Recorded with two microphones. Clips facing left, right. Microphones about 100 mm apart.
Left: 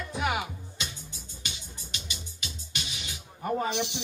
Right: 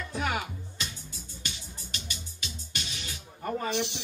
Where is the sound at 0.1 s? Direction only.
15° left (ahead or behind).